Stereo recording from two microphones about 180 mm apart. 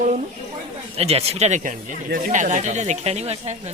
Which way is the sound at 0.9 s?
35° right (ahead or behind).